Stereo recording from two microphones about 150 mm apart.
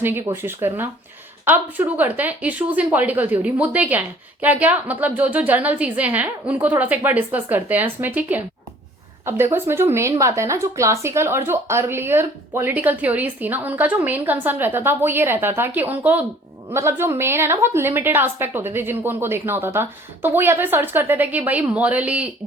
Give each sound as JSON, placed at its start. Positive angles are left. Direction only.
{"t": 0.4, "sound": "speech", "side_deg": -15}